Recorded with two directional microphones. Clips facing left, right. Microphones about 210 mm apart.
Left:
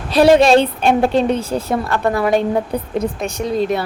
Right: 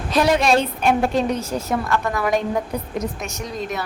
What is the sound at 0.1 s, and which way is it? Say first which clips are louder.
A woman's voice: left 7 dB; 30° left (ahead or behind).